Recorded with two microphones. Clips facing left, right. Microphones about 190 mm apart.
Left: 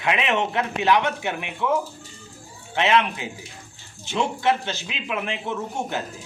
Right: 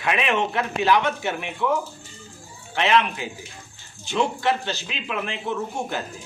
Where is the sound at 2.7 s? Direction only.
20° left (ahead or behind).